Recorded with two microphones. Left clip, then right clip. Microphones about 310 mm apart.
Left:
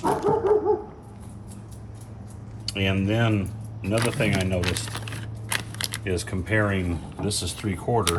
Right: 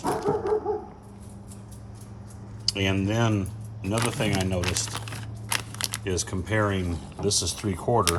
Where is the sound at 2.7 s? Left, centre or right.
Centre.